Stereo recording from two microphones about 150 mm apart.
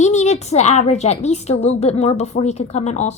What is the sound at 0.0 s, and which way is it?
Speech, 50° left (ahead or behind).